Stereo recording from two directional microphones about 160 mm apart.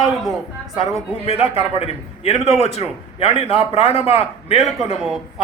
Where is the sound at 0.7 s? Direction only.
40° left (ahead or behind).